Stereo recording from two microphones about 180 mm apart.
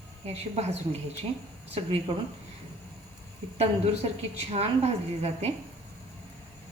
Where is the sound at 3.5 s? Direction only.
35° right (ahead or behind).